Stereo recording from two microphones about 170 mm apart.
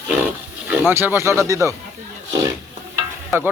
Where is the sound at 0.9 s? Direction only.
15° right (ahead or behind).